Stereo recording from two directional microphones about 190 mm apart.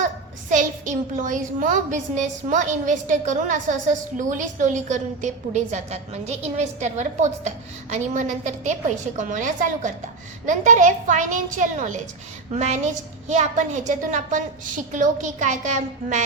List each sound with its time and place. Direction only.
0.5 s a child's voice: 40° right (ahead or behind)